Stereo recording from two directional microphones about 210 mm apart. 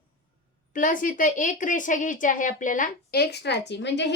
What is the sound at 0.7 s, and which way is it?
Speech, 40° left (ahead or behind).